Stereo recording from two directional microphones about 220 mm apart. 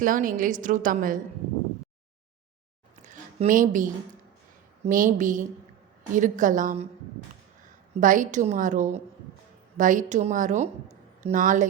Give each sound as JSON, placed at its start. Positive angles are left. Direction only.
{"t": 0.0, "sound": "a woman's voice", "side_deg": -40}
{"t": 3.0, "sound": "a sound", "side_deg": -35}
{"t": 4.9, "sound": "a woman's voice", "side_deg": -35}
{"t": 8.0, "sound": "a woman's voice", "side_deg": -35}